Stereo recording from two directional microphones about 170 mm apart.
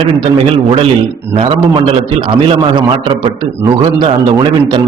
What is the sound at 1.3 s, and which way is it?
A man's voice, 35° right (ahead or behind).